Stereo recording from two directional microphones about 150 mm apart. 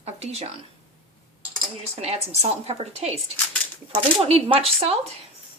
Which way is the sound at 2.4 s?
45° right (ahead or behind).